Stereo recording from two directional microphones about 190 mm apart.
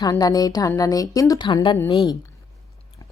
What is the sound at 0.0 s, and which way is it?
A woman's voice, 20° left (ahead or behind).